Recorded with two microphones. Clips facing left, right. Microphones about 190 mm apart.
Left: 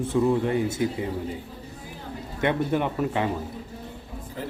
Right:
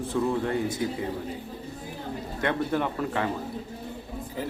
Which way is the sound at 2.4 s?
15° left (ahead or behind).